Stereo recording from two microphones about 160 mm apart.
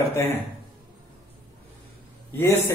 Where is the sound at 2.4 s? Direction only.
15° left (ahead or behind).